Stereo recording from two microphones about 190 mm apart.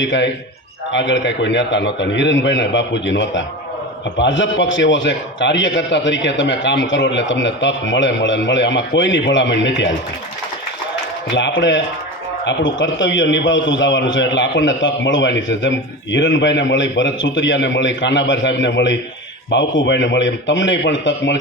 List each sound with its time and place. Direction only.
0.0 s a man's voice: 75° left (ahead or behind)
11.3 s a man's voice: 70° left (ahead or behind)